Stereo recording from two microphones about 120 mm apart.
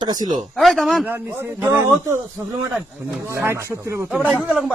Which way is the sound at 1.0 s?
20° right (ahead or behind).